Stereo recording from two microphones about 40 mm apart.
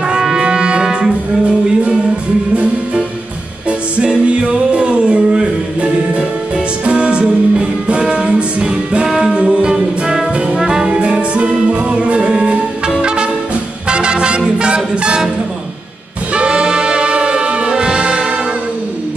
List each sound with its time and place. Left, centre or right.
0.1 s brass instrument: centre
2.5 s music: right
4.0 s music: right
16.3 s music: right